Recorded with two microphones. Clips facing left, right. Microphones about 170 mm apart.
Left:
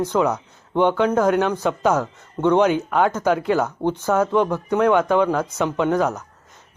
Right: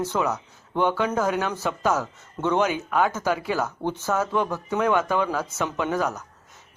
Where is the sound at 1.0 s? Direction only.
5° right (ahead or behind).